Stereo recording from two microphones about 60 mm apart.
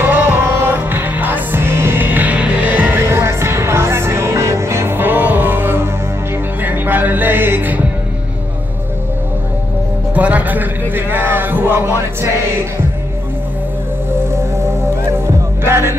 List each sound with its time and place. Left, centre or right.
0.0 s music: right
3.1 s music: right
10.1 s music: right
15.6 s music: right